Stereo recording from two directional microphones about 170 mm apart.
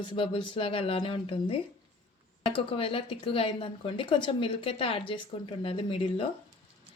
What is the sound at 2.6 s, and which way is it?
A woman's voice, 35° left (ahead or behind).